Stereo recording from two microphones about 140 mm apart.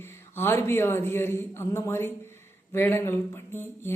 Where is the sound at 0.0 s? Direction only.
15° left (ahead or behind).